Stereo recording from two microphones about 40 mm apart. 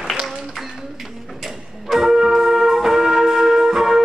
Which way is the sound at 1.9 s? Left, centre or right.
Centre.